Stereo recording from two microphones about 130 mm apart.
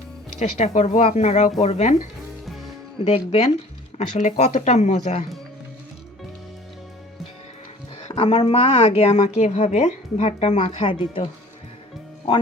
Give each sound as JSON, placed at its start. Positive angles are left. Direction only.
{"t": 0.3, "sound": "speech", "side_deg": 65}
{"t": 8.0, "sound": "speech", "side_deg": 45}